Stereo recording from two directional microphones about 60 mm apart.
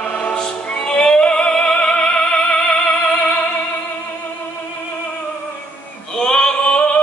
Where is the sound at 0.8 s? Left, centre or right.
Centre.